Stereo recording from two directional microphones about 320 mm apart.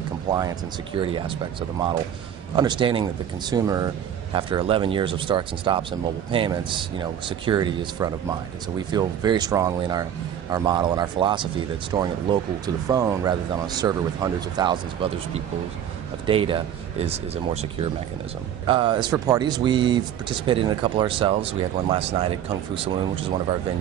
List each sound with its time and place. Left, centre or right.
0.3 s speech: centre